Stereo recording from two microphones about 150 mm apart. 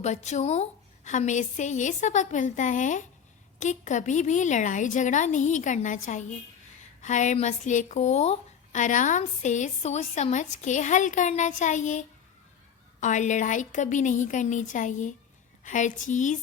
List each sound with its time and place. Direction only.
0.0 s a woman's voice: 50° left (ahead or behind)